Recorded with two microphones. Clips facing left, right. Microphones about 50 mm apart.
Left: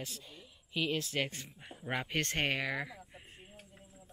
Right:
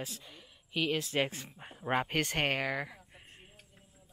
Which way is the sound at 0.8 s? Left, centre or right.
Right.